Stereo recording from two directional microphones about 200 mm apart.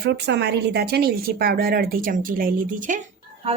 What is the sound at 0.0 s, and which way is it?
A woman's voice, 55° right (ahead or behind).